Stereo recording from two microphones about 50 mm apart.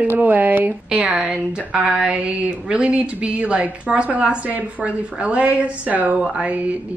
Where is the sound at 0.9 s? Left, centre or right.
Right.